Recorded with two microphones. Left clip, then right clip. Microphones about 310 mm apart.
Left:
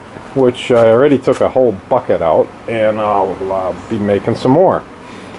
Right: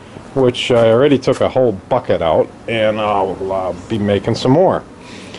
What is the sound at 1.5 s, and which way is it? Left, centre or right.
Speech, centre.